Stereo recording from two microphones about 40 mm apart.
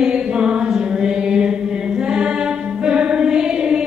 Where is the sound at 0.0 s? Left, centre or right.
Right.